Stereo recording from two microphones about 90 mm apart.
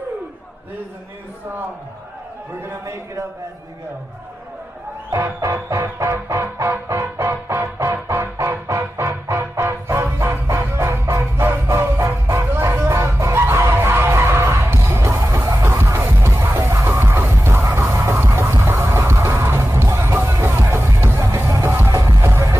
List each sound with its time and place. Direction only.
2.6 s music: 30° right (ahead or behind)
5.1 s music: 30° right (ahead or behind)
15.8 s music: 30° right (ahead or behind)